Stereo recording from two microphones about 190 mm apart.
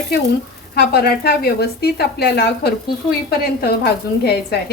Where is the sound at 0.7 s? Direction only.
55° left (ahead or behind).